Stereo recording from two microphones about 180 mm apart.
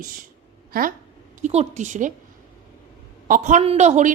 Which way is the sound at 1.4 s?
40° right (ahead or behind).